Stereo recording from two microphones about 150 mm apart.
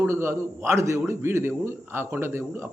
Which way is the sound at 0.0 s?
15° right (ahead or behind).